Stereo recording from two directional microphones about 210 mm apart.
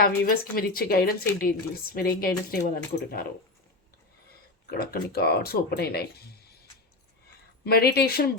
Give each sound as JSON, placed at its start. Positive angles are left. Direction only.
{"t": 0.0, "sound": "speech", "side_deg": 45}
{"t": 4.7, "sound": "speech", "side_deg": 50}
{"t": 7.6, "sound": "speech", "side_deg": 50}